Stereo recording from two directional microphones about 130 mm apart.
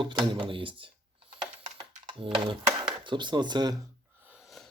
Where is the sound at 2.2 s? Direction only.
40° right (ahead or behind).